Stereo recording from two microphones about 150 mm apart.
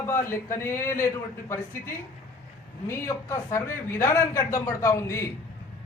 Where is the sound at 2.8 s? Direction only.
20° left (ahead or behind).